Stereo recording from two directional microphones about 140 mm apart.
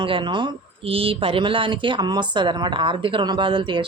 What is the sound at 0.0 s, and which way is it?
Speech, 35° right (ahead or behind).